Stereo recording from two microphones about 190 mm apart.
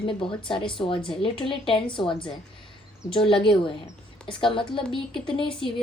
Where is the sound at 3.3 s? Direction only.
25° left (ahead or behind).